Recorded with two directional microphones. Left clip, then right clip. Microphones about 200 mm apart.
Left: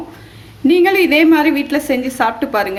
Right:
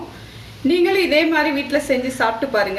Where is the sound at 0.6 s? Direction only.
50° left (ahead or behind).